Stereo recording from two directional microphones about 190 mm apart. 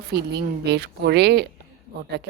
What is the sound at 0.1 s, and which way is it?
A woman's voice, 60° right (ahead or behind).